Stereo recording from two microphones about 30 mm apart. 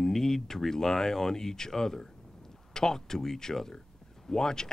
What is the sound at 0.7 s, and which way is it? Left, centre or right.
Speech, centre.